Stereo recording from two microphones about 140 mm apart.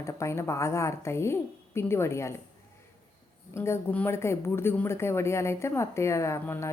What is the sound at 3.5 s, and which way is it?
A woman's voice, 20° left (ahead or behind).